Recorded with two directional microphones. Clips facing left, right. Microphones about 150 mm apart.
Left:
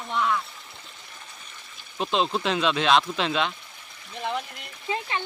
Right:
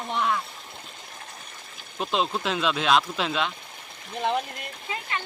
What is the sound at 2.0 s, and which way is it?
Speech, centre (ahead or behind).